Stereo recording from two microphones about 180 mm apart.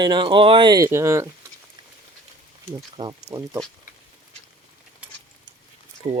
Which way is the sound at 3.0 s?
25° right (ahead or behind).